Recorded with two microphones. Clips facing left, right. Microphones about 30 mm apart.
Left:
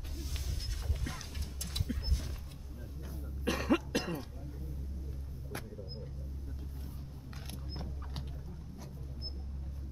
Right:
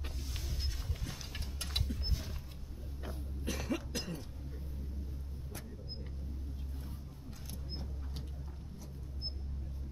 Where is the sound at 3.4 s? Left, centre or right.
Left.